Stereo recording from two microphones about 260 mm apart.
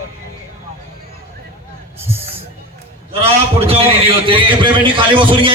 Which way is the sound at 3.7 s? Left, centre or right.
Right.